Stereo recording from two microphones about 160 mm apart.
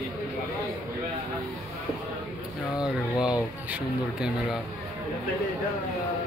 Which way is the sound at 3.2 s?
5° right (ahead or behind).